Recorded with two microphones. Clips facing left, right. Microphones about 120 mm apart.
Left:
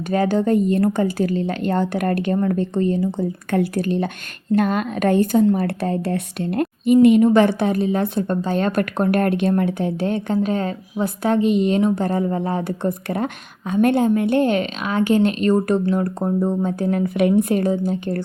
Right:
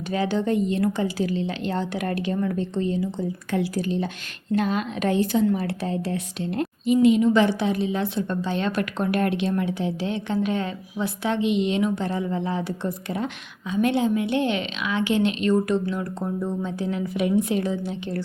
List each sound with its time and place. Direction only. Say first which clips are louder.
0.1 s speech: left 5 dB; 50° left (ahead or behind)